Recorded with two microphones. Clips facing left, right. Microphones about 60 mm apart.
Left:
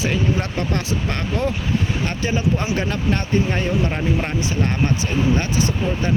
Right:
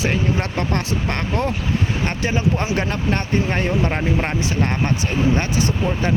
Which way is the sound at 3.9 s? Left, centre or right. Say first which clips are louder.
Right 1 dB; right.